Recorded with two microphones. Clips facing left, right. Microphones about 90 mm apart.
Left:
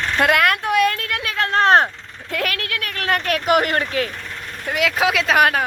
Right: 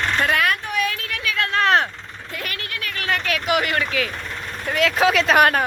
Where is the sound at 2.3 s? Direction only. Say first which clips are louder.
Left 7 dB; 75° left (ahead or behind); by 4.1 s 40° left (ahead or behind).